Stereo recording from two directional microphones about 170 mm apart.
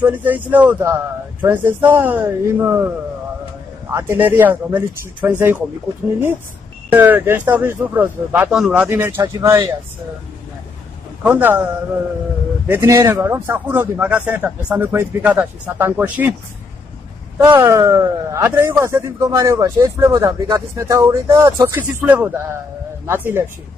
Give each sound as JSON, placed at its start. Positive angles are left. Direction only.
{"t": 0.0, "sound": "a man's voice", "side_deg": -10}
{"t": 3.9, "sound": "a man's voice", "side_deg": -15}
{"t": 6.9, "sound": "a man's voice", "side_deg": -10}
{"t": 11.2, "sound": "a man's voice", "side_deg": -10}
{"t": 12.6, "sound": "a man's voice", "side_deg": -15}
{"t": 17.4, "sound": "a man's voice", "side_deg": -15}